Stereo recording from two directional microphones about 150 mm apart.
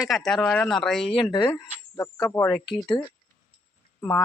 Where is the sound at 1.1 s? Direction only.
35° left (ahead or behind).